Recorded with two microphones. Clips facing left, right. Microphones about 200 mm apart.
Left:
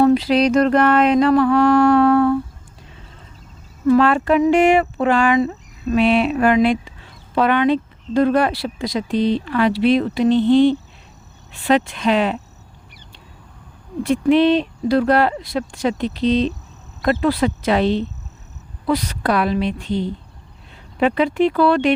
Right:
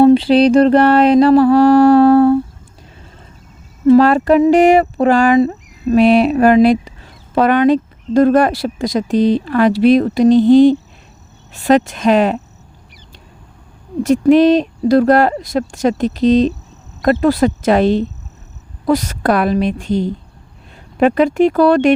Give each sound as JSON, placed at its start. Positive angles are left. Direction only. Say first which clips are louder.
{"t": 0.0, "sound": "mantra", "louder": "right 6 dB", "side_deg": -30}
{"t": 3.8, "sound": "speech", "louder": "right 5 dB", "side_deg": -35}
{"t": 14.0, "sound": "speech", "louder": "right 5 dB", "side_deg": -45}